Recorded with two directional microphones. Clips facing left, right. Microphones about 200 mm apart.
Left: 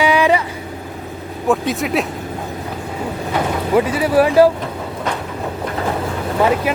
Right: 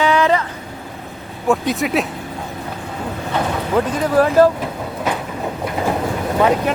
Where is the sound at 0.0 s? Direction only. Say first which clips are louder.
Left 1 dB; 10° left (ahead or behind).